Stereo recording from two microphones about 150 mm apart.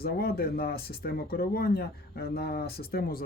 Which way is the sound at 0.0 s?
90° left.